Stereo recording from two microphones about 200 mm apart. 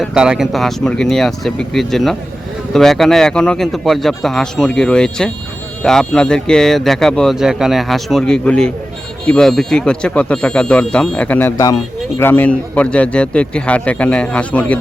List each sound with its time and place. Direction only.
0.0 s a man's voice: 5° right (ahead or behind)